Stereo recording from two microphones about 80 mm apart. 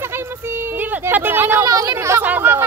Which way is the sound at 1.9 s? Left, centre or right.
Right.